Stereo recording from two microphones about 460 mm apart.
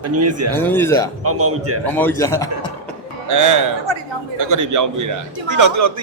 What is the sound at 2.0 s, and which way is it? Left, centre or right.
Speech, centre.